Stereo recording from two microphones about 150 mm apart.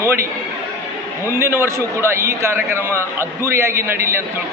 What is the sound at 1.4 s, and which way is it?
A man's voice, 15° right (ahead or behind).